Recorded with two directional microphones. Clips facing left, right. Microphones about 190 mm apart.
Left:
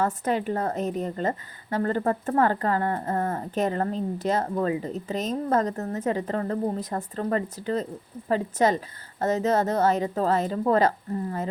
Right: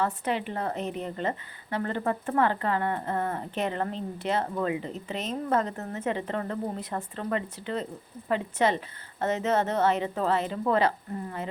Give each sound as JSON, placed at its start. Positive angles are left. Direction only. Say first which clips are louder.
{"t": 0.0, "sound": "a woman's voice", "louder": "left 3 dB", "side_deg": 40}